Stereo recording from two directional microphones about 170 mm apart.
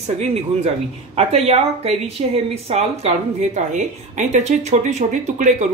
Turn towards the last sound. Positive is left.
turn(degrees=-45)  # may be behind; listen again after turning